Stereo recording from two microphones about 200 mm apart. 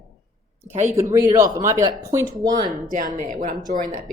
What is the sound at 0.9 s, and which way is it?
Speech, 15° right (ahead or behind).